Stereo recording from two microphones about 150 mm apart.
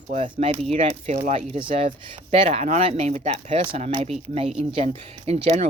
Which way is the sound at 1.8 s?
45° right (ahead or behind).